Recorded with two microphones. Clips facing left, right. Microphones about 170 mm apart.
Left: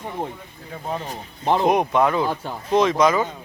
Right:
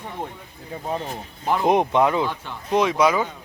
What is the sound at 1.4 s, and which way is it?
Speech, 25° left (ahead or behind).